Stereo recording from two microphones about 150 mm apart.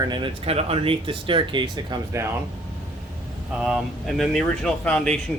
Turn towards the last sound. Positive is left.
turn(degrees=5)  # may be behind; listen again after turning